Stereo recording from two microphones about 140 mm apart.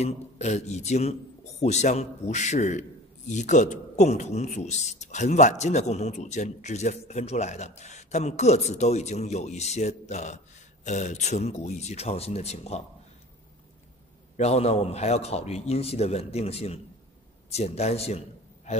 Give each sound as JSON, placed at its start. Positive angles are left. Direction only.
{"t": 0.0, "sound": "a man's voice", "side_deg": 55}
{"t": 14.3, "sound": "speech", "side_deg": 50}